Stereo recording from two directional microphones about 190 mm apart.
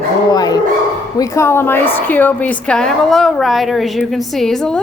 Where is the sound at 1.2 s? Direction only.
15° left (ahead or behind).